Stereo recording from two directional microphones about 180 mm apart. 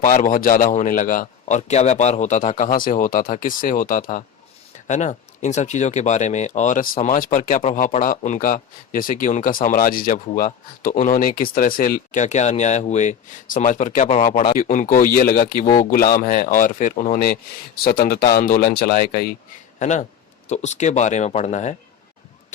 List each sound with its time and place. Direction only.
0.0 s speech: 45° left (ahead or behind)
19.8 s speech: 40° left (ahead or behind)